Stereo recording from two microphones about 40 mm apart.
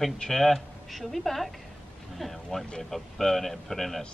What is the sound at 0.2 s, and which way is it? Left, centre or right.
A man's voice, centre.